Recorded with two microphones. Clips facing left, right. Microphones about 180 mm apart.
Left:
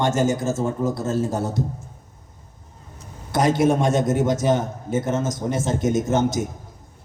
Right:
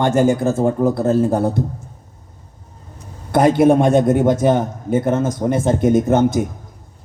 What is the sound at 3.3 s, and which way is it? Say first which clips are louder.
A man's voice: right 6 dB; 55° right (ahead or behind).